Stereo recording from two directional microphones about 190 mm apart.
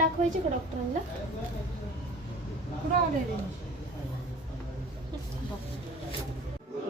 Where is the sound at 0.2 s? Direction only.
35° right (ahead or behind).